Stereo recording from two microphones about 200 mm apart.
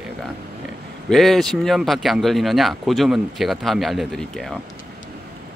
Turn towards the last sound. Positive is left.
turn(degrees=0)  # may be behind; listen again after turning